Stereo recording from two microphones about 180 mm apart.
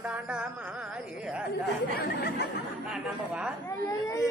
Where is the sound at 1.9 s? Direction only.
55° left (ahead or behind).